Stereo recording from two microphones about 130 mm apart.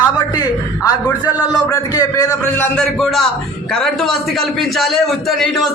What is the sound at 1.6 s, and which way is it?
Speech, 25° left (ahead or behind).